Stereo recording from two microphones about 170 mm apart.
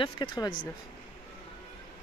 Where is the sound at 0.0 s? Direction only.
25° left (ahead or behind).